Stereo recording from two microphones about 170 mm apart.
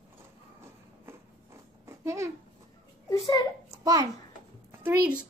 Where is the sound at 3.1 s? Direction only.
20° left (ahead or behind).